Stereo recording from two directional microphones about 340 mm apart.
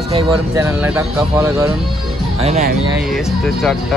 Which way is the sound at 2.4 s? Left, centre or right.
Right.